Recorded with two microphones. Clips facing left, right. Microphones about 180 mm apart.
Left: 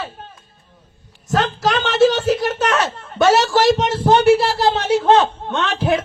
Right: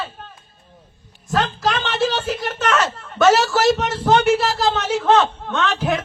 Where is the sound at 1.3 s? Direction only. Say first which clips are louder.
Left 2 dB; 40° left (ahead or behind).